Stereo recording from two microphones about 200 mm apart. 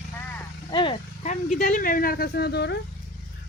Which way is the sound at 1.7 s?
45° left (ahead or behind).